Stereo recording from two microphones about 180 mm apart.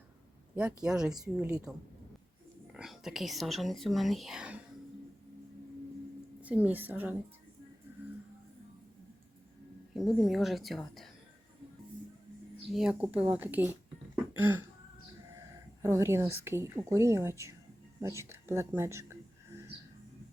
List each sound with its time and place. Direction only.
0.5 s speech: 5° right (ahead or behind)
2.7 s speech: centre (ahead or behind)
6.4 s a woman's voice: 10° right (ahead or behind)
9.9 s speech: centre (ahead or behind)
12.7 s a woman's voice: 5° right (ahead or behind)
15.8 s a woman's voice: 15° right (ahead or behind)